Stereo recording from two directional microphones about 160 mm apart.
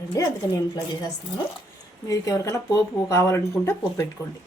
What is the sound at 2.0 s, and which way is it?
Speech, 20° left (ahead or behind).